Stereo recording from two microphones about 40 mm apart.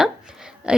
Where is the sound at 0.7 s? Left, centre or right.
Right.